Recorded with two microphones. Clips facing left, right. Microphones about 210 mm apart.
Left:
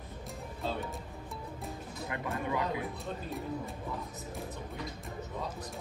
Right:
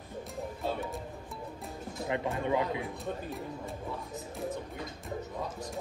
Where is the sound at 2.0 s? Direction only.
25° right (ahead or behind).